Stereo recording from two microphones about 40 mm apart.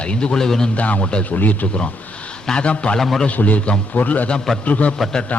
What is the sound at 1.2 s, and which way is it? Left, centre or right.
Speech, left.